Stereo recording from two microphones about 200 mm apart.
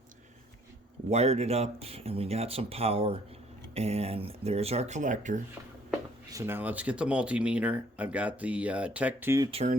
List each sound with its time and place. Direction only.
1.1 s speech: 30° right (ahead or behind)
6.3 s speech: 10° right (ahead or behind)
9.5 s speech: 30° right (ahead or behind)